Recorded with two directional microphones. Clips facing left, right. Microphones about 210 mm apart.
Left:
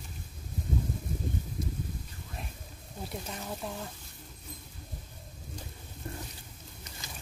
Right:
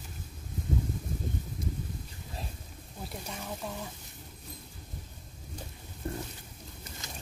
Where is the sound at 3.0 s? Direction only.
Centre (ahead or behind).